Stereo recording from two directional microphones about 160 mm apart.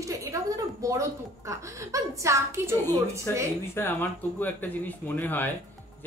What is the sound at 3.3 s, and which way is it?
Speech, 15° left (ahead or behind).